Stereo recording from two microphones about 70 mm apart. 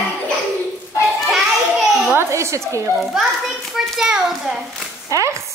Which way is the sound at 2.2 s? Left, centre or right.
Right.